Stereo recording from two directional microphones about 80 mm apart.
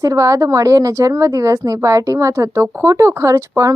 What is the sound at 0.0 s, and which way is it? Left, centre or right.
A woman's voice, right.